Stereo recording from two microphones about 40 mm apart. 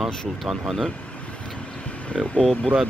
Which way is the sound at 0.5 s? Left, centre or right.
Centre.